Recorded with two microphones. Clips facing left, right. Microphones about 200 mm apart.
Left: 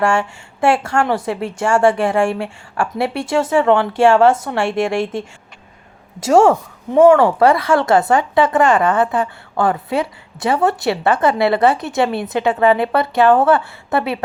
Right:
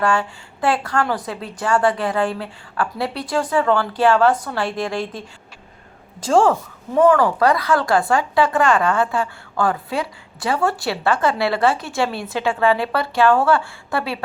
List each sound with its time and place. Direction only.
0.0 s speech: 25° left (ahead or behind)
6.3 s speech: 25° left (ahead or behind)